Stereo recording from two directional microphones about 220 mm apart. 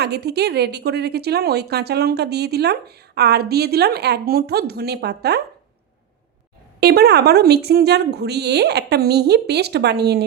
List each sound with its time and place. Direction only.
0.0 s speech: 50° right (ahead or behind)
6.7 s speech: 45° right (ahead or behind)